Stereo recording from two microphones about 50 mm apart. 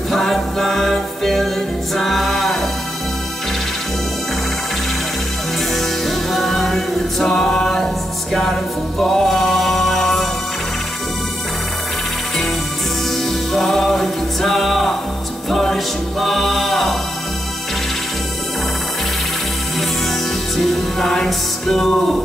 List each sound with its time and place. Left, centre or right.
0.1 s music: centre
2.0 s a capella: centre
5.8 s music: centre
13.2 s music: centre
20.5 s music: centre